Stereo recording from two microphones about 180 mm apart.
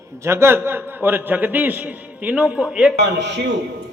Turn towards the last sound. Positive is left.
turn(degrees=-75)  # may be behind; listen again after turning